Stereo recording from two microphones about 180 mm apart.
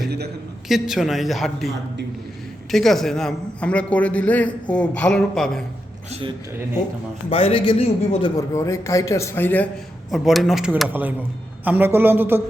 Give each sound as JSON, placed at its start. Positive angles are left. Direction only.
{"t": 0.7, "sound": "a man's voice", "side_deg": 0}
{"t": 6.1, "sound": "a man's voice", "side_deg": -35}
{"t": 7.3, "sound": "a man's voice", "side_deg": 30}
{"t": 8.4, "sound": "a man's voice", "side_deg": 15}
{"t": 10.1, "sound": "speech", "side_deg": 0}